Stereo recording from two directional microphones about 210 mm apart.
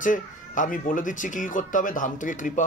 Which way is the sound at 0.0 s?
40° left (ahead or behind).